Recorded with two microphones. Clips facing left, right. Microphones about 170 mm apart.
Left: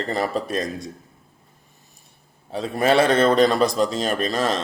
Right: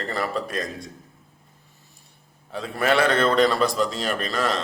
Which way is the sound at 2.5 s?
20° left (ahead or behind).